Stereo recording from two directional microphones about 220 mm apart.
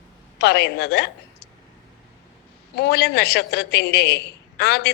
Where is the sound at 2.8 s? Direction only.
45° left (ahead or behind).